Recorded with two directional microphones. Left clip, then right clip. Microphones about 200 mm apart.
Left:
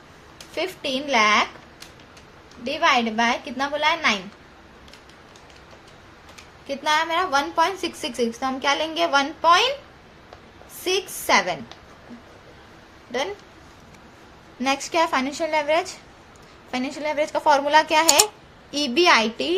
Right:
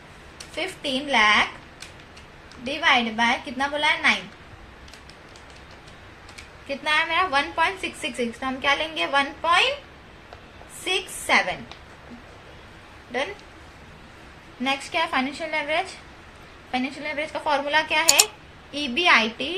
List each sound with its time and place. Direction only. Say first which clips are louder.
0.5 s a woman's voice: left 2 dB; 50° left (ahead or behind)
2.6 s a woman's voice: left 1 dB; 45° left (ahead or behind)
6.7 s a woman's voice: left 1 dB; 55° left (ahead or behind)
10.8 s a woman's voice: left 2 dB; 50° left (ahead or behind)
14.6 s a woman's voice: left 3 dB; 60° left (ahead or behind)